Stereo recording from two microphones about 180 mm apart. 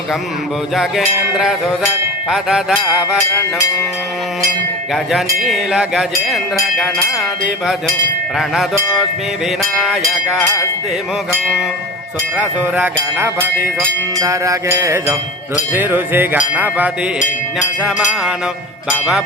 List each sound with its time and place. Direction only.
0.8 s music: centre (ahead or behind)
5.1 s music: centre (ahead or behind)
12.4 s music: 10° right (ahead or behind)